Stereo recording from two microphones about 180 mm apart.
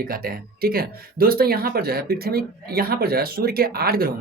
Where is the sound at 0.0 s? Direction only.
55° right (ahead or behind).